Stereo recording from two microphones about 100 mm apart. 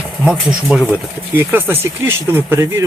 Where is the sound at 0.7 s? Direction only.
15° right (ahead or behind); by 2.8 s 30° right (ahead or behind).